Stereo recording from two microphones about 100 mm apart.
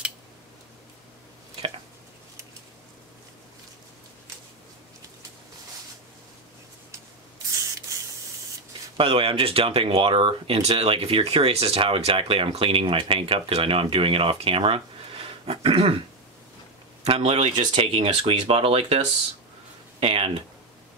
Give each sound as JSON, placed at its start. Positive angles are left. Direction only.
{"t": 8.9, "sound": "speech", "side_deg": -65}
{"t": 17.0, "sound": "speech", "side_deg": -85}
{"t": 20.0, "sound": "speech", "side_deg": -70}